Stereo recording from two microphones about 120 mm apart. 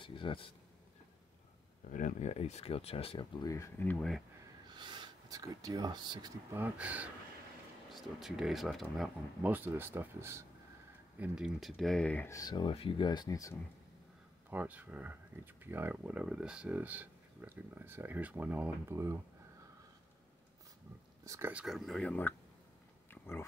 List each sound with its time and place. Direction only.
0.0 s speech: 45° left (ahead or behind)
1.9 s speech: 90° left; by 3.3 s 50° left (ahead or behind)
3.4 s speech: 25° left (ahead or behind)
3.8 s speech: 15° left (ahead or behind)
4.7 s speech: 40° right (ahead or behind)
6.5 s speech: 15° right (ahead or behind)
7.9 s speech: centre (ahead or behind)
9.4 s speech: 15° right (ahead or behind)
11.1 s speech: 5° right (ahead or behind); by 12.3 s 10° left (ahead or behind)
12.3 s speech: 30° left (ahead or behind)
12.5 s speech: 50° left (ahead or behind); by 13.6 s 30° left (ahead or behind)
14.5 s speech: 15° right (ahead or behind)
21.3 s speech: 20° right (ahead or behind)
21.5 s speech: centre (ahead or behind)